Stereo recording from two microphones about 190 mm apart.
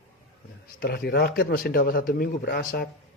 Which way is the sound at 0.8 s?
55° left (ahead or behind).